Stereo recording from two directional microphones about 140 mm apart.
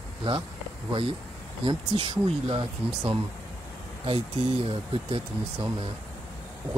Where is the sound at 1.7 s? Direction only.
40° right (ahead or behind).